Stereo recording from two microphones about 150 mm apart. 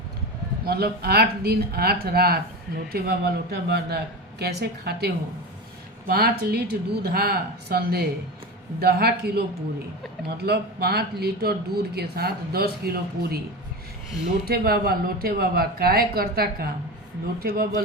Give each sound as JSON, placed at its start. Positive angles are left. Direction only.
{"t": 0.6, "sound": "speech", "side_deg": -90}
{"t": 14.4, "sound": "speech", "side_deg": -90}